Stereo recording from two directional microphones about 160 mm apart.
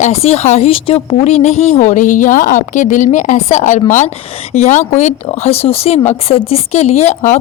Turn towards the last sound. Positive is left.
turn(degrees=45)  # may be behind; listen again after turning